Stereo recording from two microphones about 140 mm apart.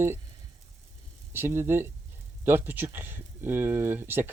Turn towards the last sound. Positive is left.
turn(degrees=-15)  # may be behind; listen again after turning